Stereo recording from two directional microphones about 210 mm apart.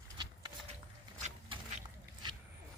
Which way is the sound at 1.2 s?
35° right (ahead or behind).